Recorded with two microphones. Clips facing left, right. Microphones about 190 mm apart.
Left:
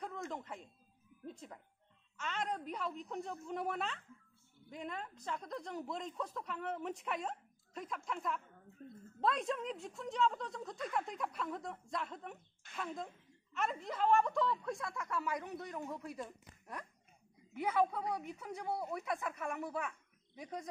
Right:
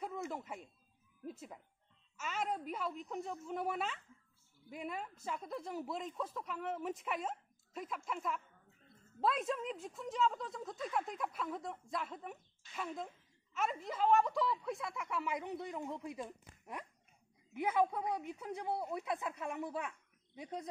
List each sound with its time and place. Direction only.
0.0 s a sound: 5° right (ahead or behind)
1.2 s speech: 5° right (ahead or behind)
15.2 s speech: 25° right (ahead or behind)
17.6 s speech: 15° right (ahead or behind)